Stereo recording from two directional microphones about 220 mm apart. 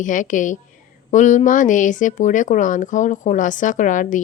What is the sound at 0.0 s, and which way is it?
A woman's voice, 35° left (ahead or behind).